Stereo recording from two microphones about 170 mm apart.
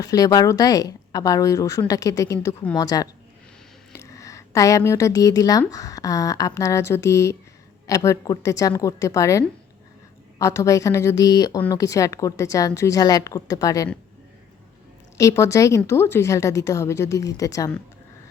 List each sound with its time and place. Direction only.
0.0 s a woman's voice: 20° left (ahead or behind)
15.2 s a woman's voice: 15° left (ahead or behind)